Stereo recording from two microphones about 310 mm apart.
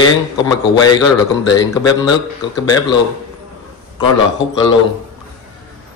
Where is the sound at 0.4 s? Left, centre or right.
Centre.